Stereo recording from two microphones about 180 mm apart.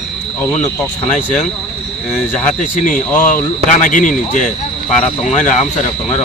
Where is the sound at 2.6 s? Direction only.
45° left (ahead or behind).